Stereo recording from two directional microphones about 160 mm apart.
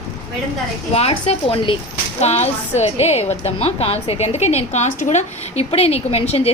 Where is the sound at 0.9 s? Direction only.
40° left (ahead or behind).